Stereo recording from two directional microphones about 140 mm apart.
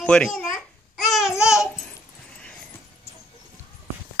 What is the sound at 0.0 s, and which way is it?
Babbling, 5° left (ahead or behind).